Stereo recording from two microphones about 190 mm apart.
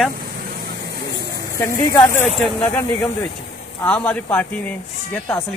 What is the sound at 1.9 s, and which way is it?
Speech, 15° left (ahead or behind).